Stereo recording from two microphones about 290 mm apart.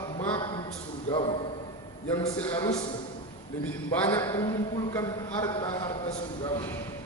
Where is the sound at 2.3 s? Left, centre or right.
Centre.